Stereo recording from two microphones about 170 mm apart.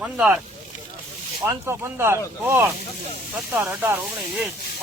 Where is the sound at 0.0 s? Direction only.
5° right (ahead or behind).